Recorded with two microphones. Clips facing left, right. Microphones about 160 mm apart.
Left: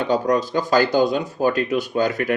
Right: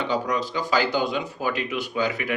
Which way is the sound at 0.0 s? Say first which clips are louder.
Left 6 dB; 45° left (ahead or behind).